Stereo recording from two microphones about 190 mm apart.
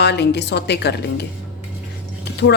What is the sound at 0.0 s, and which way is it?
Speech, 60° left (ahead or behind).